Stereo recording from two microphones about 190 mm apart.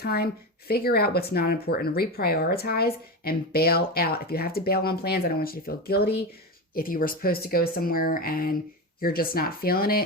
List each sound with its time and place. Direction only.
0.0 s speech: 55° left (ahead or behind)